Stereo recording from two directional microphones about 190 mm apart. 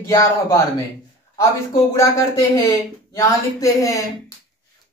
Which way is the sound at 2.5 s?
15° left (ahead or behind).